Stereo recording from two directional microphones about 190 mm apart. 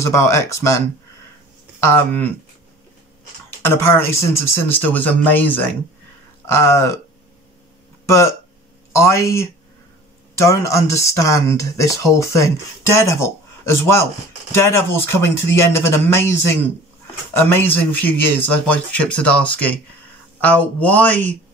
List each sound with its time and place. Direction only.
0.0 s speech: 15° left (ahead or behind)
3.4 s speech: 10° left (ahead or behind)
8.9 s speech: 15° left (ahead or behind)